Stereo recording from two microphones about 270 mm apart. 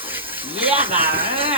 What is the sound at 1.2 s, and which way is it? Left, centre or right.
Speech, centre.